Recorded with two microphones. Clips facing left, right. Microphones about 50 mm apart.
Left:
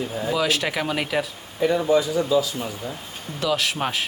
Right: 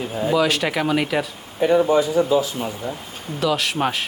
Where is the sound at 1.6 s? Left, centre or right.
Right.